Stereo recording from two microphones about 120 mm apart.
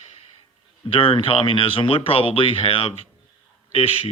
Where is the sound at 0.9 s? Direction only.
50° left (ahead or behind).